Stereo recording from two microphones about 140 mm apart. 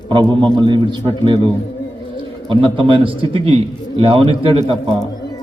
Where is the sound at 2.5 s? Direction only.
35° right (ahead or behind).